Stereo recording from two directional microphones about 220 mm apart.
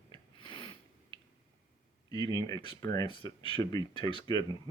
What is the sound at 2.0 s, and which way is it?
Speech, 15° left (ahead or behind).